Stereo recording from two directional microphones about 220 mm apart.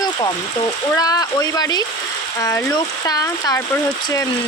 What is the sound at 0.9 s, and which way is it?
Speech, 15° left (ahead or behind).